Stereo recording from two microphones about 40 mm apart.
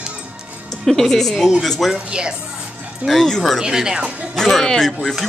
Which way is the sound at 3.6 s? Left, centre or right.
Centre.